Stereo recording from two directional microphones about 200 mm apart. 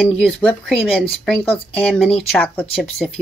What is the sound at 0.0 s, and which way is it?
Speech, 5° left (ahead or behind).